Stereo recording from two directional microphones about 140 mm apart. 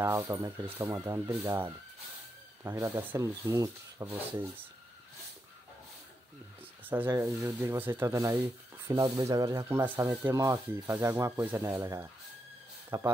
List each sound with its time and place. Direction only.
0.0 s speech: 20° right (ahead or behind)
7.1 s speech: 20° right (ahead or behind)